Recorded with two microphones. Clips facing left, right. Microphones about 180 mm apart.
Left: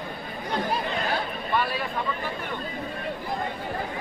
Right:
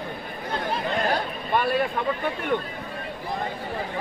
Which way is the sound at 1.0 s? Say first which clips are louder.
Right 2 dB; 50° right (ahead or behind).